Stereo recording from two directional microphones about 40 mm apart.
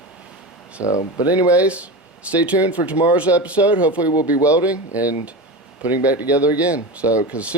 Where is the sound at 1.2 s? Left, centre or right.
Right.